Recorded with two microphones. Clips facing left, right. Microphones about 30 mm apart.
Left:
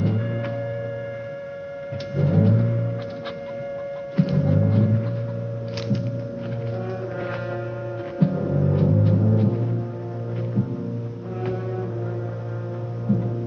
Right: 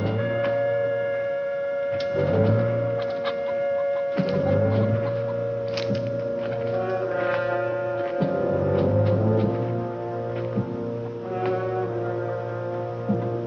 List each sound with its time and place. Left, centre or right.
0.0 s music: right
2.1 s music: centre
4.2 s music: centre
8.2 s music: centre